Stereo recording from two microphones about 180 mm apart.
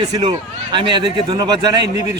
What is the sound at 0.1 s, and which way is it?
A man's voice, 25° right (ahead or behind).